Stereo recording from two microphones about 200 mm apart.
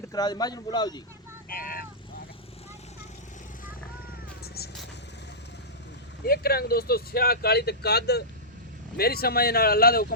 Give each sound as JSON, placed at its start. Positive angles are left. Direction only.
{"t": 0.1, "sound": "speech", "side_deg": 20}
{"t": 1.5, "sound": "vehicle", "side_deg": 45}
{"t": 6.2, "sound": "speech", "side_deg": 50}